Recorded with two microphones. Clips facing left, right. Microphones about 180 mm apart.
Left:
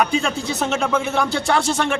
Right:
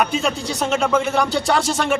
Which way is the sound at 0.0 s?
Centre (ahead or behind).